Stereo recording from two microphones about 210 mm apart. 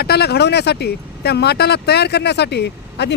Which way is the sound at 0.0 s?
50° left (ahead or behind).